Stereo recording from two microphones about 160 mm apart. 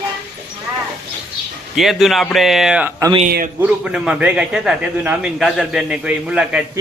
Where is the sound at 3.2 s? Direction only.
70° right (ahead or behind).